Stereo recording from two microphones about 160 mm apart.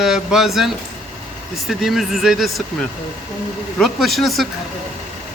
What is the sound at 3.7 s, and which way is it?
Speech, centre (ahead or behind).